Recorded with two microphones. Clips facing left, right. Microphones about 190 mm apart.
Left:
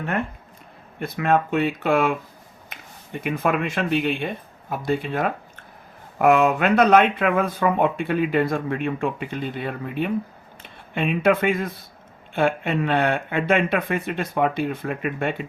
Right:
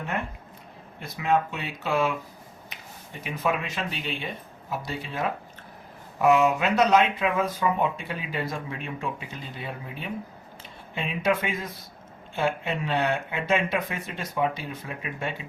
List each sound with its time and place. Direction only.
0.9 s speech: 55° left (ahead or behind)